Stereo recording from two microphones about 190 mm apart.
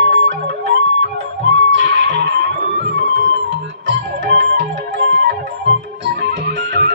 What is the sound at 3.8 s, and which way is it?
Music, 65° right (ahead or behind).